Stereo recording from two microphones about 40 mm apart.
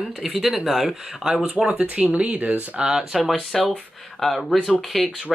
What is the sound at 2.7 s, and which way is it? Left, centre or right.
Speech, right.